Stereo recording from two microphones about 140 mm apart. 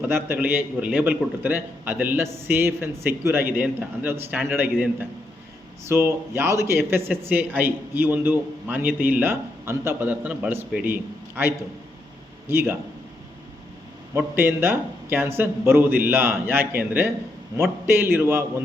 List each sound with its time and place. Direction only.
0.1 s a man's voice: 15° right (ahead or behind)
14.1 s speech: 15° right (ahead or behind)